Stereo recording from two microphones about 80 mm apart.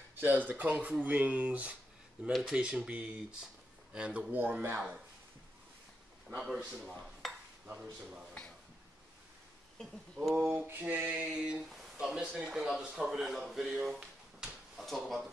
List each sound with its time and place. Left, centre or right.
0.1 s a sound: right
0.5 s speech: centre
6.3 s speech: centre
6.9 s dishes: centre
7.7 s speech: centre
9.8 s speech: centre
10.7 s speech: right
11.2 s speech: centre